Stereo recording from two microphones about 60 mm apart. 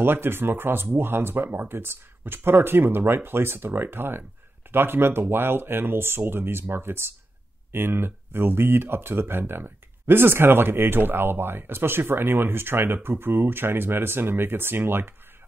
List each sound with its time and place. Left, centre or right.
0.0 s speech: right